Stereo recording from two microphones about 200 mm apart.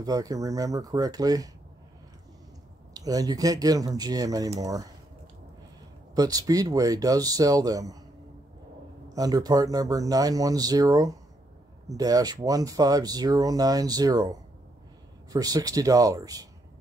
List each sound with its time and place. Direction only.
0.0 s speech: 20° right (ahead or behind)
2.9 s speech: 20° right (ahead or behind)
6.1 s speech: 20° right (ahead or behind)
9.1 s speech: 20° right (ahead or behind)
15.3 s speech: 20° right (ahead or behind)